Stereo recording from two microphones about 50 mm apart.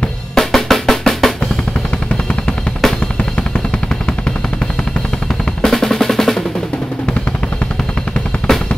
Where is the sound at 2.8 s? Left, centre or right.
Centre.